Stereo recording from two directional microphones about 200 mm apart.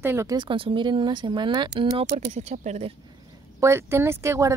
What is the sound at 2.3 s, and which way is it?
Speech, 35° right (ahead or behind).